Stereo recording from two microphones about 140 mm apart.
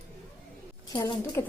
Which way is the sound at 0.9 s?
30° left (ahead or behind).